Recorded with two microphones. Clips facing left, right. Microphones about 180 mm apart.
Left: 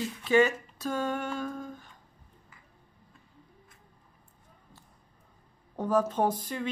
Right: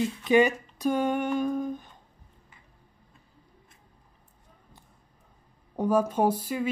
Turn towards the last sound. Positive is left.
turn(degrees=-10)  # may be behind; listen again after turning